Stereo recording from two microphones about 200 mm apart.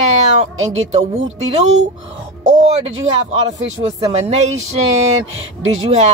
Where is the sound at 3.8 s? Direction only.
45° right (ahead or behind).